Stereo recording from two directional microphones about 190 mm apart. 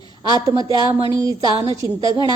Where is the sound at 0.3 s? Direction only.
20° right (ahead or behind).